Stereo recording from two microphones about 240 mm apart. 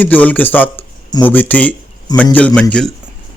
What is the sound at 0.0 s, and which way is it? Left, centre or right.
A man's voice, centre.